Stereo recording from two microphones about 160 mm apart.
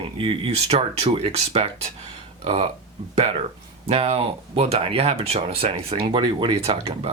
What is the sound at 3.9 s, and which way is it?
Speech, 35° right (ahead or behind).